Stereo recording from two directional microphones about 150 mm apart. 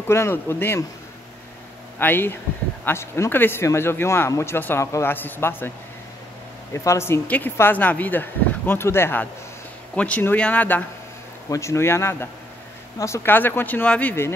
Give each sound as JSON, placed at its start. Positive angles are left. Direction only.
{"t": 0.1, "sound": "speech", "side_deg": 15}
{"t": 2.0, "sound": "speech", "side_deg": 15}
{"t": 6.7, "sound": "speech", "side_deg": 20}